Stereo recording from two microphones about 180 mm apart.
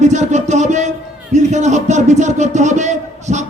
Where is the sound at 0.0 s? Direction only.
40° right (ahead or behind).